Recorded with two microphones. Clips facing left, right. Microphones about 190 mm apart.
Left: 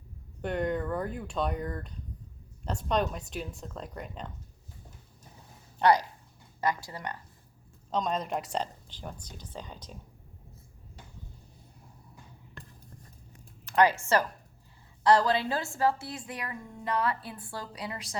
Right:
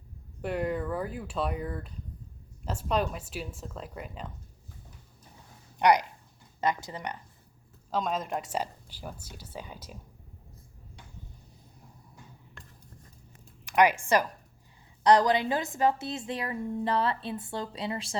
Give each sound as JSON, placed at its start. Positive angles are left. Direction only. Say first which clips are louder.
{"t": 0.4, "sound": "speech", "louder": "even", "side_deg": -5}
{"t": 5.8, "sound": "a woman's voice", "louder": "right 1 dB", "side_deg": -15}
{"t": 7.9, "sound": "speech", "louder": "even", "side_deg": -5}
{"t": 13.7, "sound": "a woman's voice", "louder": "right 1 dB", "side_deg": -15}